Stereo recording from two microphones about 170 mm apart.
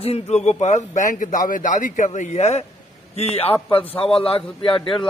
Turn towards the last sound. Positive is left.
turn(degrees=30)  # may be behind; listen again after turning